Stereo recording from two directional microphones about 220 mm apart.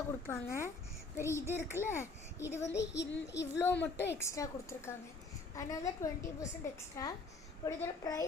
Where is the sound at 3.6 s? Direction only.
10° left (ahead or behind).